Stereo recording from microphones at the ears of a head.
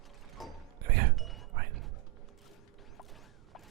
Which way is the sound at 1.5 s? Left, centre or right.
Right.